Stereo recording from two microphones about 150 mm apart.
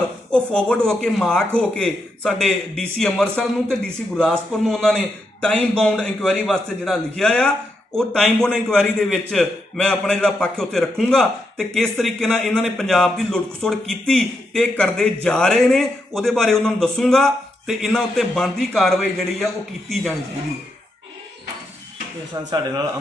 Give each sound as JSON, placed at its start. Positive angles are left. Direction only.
{"t": 0.3, "sound": "a man's voice", "side_deg": 5}
{"t": 22.3, "sound": "speech", "side_deg": -25}